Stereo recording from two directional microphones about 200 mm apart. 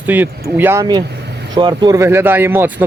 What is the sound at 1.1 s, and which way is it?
Vehicle, 55° right (ahead or behind).